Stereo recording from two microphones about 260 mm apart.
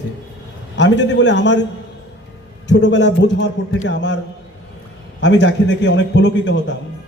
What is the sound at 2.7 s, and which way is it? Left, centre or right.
A man's voice, left.